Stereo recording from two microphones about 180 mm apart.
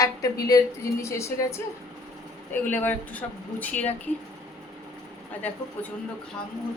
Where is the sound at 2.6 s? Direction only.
10° left (ahead or behind).